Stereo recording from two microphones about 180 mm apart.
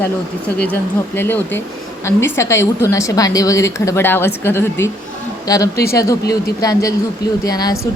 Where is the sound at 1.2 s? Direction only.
10° left (ahead or behind).